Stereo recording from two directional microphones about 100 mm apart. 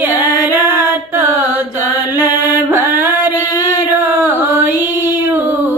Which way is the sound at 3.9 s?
20° right (ahead or behind).